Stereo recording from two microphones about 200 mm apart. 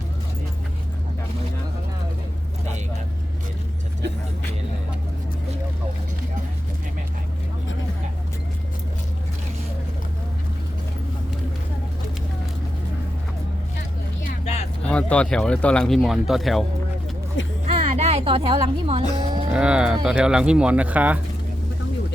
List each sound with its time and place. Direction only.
14.8 s speech: 5° left (ahead or behind)
17.7 s music: 35° right (ahead or behind)
19.5 s speech: 5° right (ahead or behind)